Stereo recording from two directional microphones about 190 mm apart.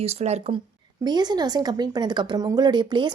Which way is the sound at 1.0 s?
20° right (ahead or behind).